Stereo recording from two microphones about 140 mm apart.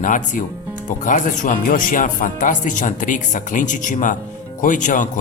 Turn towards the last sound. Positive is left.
turn(degrees=65)  # may be behind; listen again after turning